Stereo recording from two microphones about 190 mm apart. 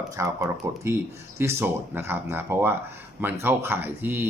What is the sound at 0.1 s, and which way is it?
Speech, 15° right (ahead or behind).